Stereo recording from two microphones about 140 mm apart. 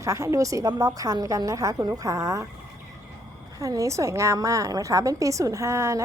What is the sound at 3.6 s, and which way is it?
A woman's voice, 25° right (ahead or behind).